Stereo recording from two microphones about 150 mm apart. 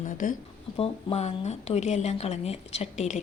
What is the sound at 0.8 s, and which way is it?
Speech, 45° left (ahead or behind).